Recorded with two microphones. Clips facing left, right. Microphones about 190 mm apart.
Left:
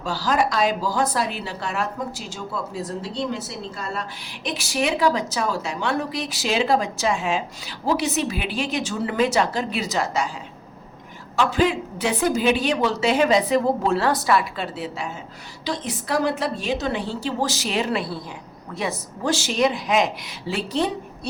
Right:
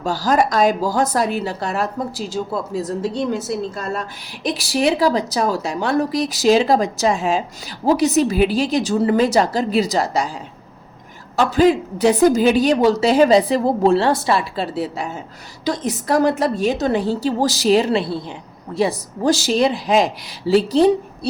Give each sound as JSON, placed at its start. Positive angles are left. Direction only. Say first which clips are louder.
{"t": 0.0, "sound": "a woman's voice", "louder": "right 5 dB", "side_deg": -45}
{"t": 11.3, "sound": "a woman's voice", "louder": "right 6 dB", "side_deg": -40}